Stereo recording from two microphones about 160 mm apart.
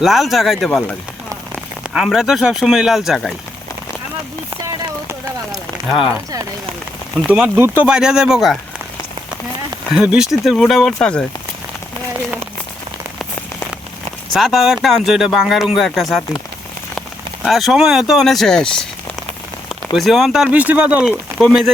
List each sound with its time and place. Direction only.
0.0 s speech: centre (ahead or behind)
7.3 s speech: 10° right (ahead or behind)
9.9 s speech: 5° right (ahead or behind)
14.3 s speech: centre (ahead or behind)
17.4 s speech: centre (ahead or behind)
20.0 s speech: centre (ahead or behind)